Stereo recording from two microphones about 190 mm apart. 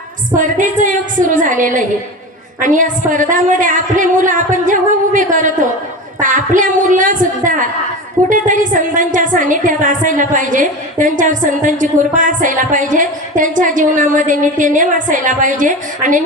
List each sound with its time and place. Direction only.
0.3 s a woman's voice: 45° right (ahead or behind)